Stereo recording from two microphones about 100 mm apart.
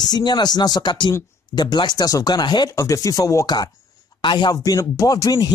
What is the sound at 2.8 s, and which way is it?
Speech, 35° left (ahead or behind).